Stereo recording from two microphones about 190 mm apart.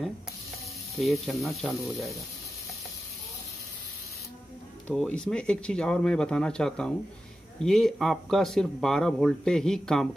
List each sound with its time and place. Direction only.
0.9 s speech: centre (ahead or behind)
4.8 s speech: 5° left (ahead or behind)